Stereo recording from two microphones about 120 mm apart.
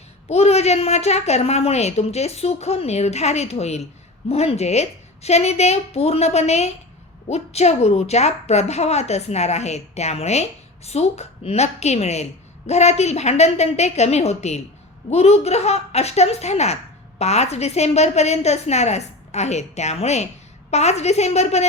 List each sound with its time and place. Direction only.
0.3 s a woman's voice: 60° left (ahead or behind)